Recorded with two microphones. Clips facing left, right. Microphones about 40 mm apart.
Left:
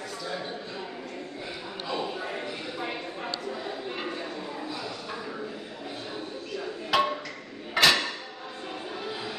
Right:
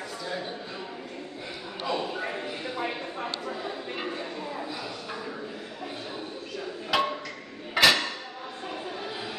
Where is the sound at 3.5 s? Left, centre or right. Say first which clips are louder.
Even; centre.